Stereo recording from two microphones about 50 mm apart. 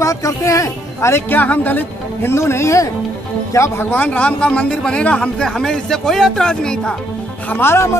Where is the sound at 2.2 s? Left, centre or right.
Left.